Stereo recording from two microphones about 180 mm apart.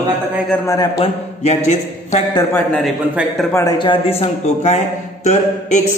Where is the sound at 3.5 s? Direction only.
20° left (ahead or behind).